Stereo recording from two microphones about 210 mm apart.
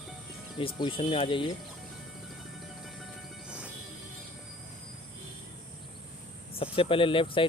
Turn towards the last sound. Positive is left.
turn(degrees=25)  # may be behind; listen again after turning